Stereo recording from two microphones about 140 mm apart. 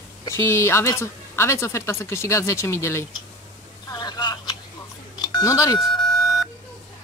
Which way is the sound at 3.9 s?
30° left (ahead or behind).